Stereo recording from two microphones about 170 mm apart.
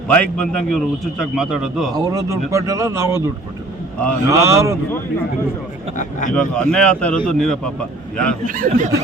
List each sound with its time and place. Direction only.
0.1 s a man's voice: 5° left (ahead or behind)
1.9 s speech: 20° right (ahead or behind)
4.3 s speech: 20° right (ahead or behind)
6.0 s speech: 50° left (ahead or behind)
6.3 s a man's voice: 5° left (ahead or behind)
8.4 s speech: 50° right (ahead or behind)